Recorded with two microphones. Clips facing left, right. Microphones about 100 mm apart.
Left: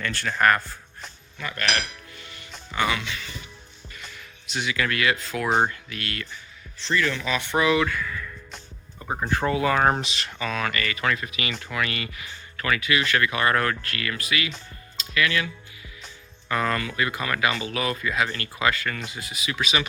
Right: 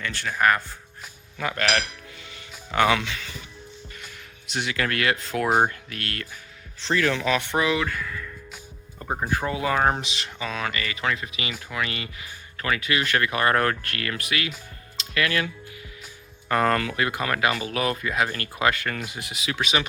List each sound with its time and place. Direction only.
0.0 s speech: 15° right (ahead or behind)
1.4 s speech: 90° right
4.4 s speech: 55° right (ahead or behind)
6.9 s speech: 75° right (ahead or behind)
7.5 s speech: 25° right (ahead or behind)
8.5 s music: 10° right (ahead or behind)
9.5 s speech: 20° right (ahead or behind)
9.8 s speech: 5° right (ahead or behind)
10.2 s speech: 15° right (ahead or behind)
12.5 s a sound: 25° right (ahead or behind)
12.8 s speech: 40° right (ahead or behind)
16.5 s speech: 45° right (ahead or behind)
19.1 s speech: 70° right (ahead or behind)